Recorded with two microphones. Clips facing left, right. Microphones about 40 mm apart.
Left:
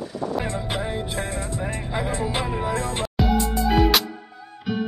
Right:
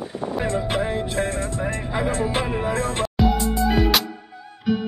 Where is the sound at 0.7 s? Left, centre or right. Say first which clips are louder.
Right 4 dB; centre.